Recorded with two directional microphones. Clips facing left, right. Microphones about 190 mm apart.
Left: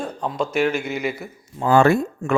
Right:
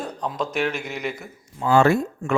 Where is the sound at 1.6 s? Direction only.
50° left (ahead or behind).